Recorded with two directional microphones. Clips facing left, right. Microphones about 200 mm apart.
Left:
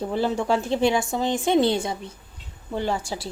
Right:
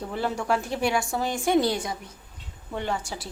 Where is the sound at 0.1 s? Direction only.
25° left (ahead or behind).